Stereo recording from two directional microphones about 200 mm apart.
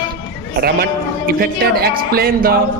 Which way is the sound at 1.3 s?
50° right (ahead or behind).